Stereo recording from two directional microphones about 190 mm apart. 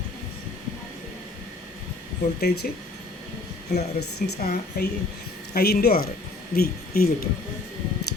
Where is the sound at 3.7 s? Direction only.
55° left (ahead or behind).